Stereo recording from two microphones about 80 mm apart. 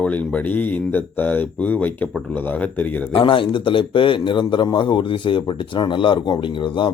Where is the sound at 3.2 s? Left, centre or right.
Left.